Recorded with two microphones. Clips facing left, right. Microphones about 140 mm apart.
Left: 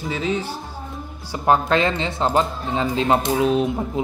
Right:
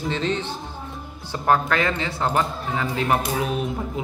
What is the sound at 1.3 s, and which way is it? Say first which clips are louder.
Speech: left 2 dB; 20° left (ahead or behind).